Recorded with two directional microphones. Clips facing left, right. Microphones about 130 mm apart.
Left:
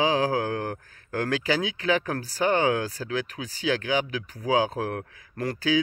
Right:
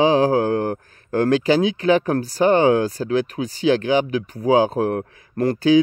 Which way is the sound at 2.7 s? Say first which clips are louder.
Right 8 dB; 45° right (ahead or behind).